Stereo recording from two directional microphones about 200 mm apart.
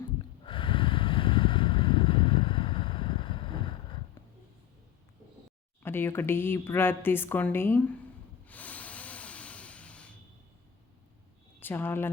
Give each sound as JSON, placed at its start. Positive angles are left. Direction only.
{"t": 0.4, "sound": "vehicle", "side_deg": 25}
{"t": 5.8, "sound": "speech", "side_deg": 10}
{"t": 8.4, "sound": "a sound", "side_deg": 5}
{"t": 11.6, "sound": "speech", "side_deg": 10}